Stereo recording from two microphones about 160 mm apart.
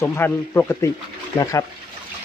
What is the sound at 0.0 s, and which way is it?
Speech, 15° left (ahead or behind).